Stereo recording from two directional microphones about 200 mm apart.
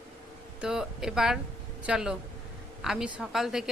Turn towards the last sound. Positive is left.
turn(degrees=0)  # may be behind; listen again after turning